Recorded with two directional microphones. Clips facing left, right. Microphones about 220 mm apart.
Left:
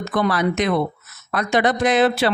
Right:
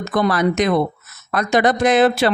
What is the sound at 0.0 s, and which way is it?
Speech, 45° right (ahead or behind).